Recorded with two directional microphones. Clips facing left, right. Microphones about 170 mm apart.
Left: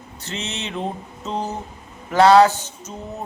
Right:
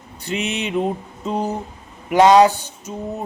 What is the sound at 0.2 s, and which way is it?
Speech, 15° right (ahead or behind).